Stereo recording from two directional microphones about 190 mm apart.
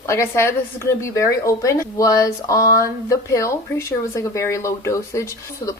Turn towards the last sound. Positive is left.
turn(degrees=15)  # may be behind; listen again after turning